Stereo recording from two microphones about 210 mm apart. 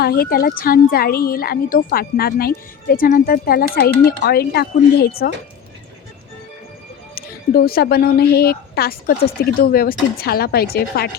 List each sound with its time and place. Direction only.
0.0 s a woman's voice: 45° left (ahead or behind)
7.2 s a woman's voice: 45° left (ahead or behind)